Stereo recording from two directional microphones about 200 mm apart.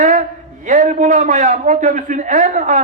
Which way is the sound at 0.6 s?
40° right (ahead or behind).